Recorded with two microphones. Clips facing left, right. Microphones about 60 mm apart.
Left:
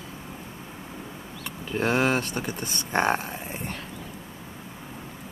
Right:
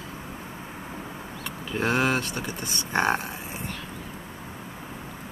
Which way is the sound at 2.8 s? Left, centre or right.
Left.